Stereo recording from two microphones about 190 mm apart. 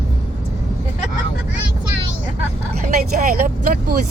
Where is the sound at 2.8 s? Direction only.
45° right (ahead or behind).